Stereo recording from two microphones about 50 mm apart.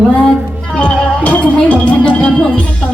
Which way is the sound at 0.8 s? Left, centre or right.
Left.